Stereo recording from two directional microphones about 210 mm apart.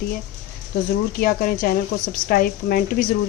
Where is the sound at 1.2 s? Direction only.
45° left (ahead or behind).